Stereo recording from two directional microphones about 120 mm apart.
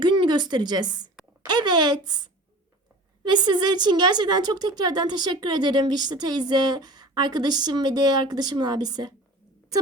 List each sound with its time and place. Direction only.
0.0 s a woman's voice: 40° right (ahead or behind)